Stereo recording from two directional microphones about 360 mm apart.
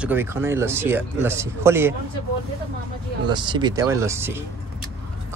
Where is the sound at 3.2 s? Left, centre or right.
Centre.